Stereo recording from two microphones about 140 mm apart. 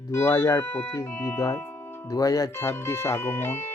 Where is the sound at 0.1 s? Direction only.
15° left (ahead or behind).